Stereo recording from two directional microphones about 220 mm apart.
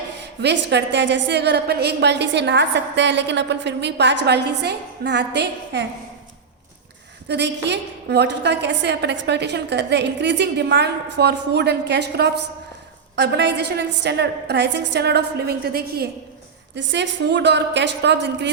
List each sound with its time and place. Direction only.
0.4 s a woman's voice: 50° right (ahead or behind)
7.3 s a woman's voice: 50° right (ahead or behind)